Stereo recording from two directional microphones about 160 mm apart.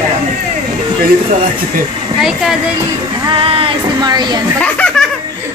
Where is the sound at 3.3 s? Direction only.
35° right (ahead or behind).